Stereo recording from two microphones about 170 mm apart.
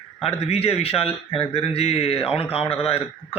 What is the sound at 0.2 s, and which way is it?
A man's voice, 35° left (ahead or behind).